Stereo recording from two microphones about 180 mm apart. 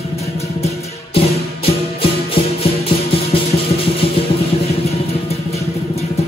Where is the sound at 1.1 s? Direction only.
30° left (ahead or behind).